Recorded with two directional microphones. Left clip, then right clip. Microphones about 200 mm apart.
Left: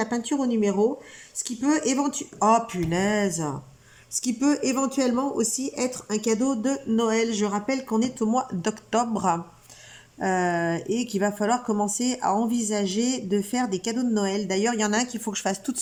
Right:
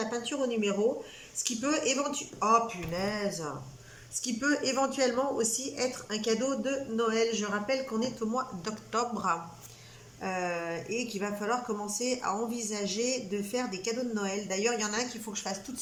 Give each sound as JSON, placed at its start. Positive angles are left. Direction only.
{"t": 0.0, "sound": "speech", "side_deg": 35}